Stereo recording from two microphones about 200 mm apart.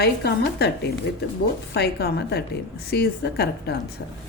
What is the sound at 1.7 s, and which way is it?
A woman's voice, 55° left (ahead or behind).